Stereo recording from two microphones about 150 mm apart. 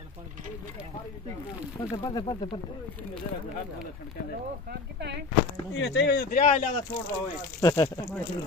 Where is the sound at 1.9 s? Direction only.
25° left (ahead or behind).